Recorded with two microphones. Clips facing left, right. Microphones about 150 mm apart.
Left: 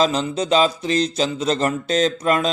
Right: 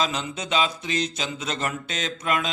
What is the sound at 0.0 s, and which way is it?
Mantra, 35° left (ahead or behind).